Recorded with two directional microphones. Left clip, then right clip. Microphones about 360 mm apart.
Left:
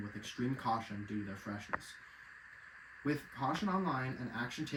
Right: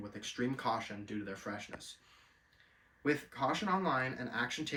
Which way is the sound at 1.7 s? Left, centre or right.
Right.